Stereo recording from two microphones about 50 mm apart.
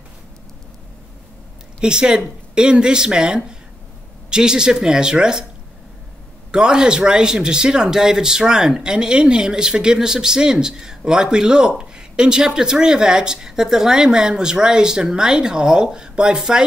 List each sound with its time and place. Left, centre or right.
1.8 s speech: centre
6.5 s speech: centre